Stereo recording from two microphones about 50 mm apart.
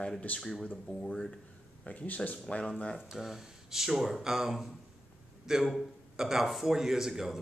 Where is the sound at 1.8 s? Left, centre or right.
Left.